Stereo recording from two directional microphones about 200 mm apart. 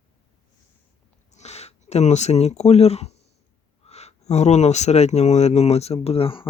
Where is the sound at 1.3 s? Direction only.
35° left (ahead or behind).